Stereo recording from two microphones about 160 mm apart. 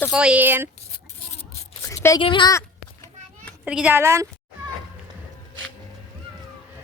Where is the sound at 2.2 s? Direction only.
30° left (ahead or behind).